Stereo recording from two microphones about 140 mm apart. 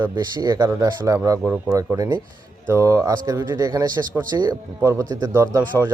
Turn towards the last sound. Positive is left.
turn(degrees=-20)  # may be behind; listen again after turning